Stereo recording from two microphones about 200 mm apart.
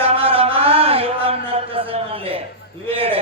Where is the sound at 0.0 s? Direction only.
30° right (ahead or behind).